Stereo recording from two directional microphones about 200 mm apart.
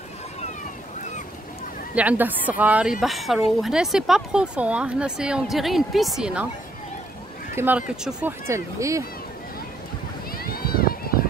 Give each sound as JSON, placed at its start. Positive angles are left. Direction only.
{"t": 2.0, "sound": "a woman's voice", "side_deg": -10}
{"t": 7.5, "sound": "a woman's voice", "side_deg": -10}
{"t": 10.3, "sound": "a sound", "side_deg": 50}